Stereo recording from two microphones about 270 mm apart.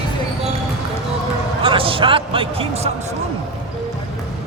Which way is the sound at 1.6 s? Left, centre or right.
Centre.